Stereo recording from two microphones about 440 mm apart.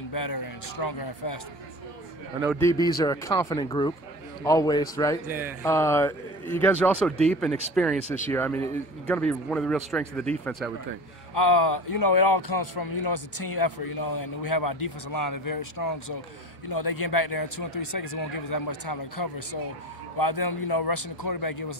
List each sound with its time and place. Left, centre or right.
0.1 s a man's voice: left
2.4 s a man's voice: centre
11.5 s a man's voice: left